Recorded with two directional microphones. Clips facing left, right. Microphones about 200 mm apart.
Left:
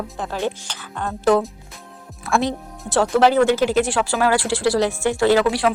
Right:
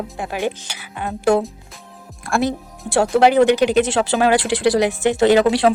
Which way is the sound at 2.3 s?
Centre (ahead or behind).